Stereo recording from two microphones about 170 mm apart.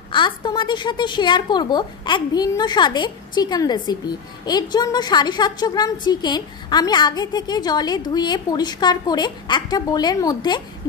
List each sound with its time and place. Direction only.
0.1 s a woman's voice: 30° left (ahead or behind)